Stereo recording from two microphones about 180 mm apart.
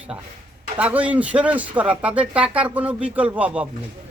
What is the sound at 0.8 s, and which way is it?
Speech, 10° right (ahead or behind).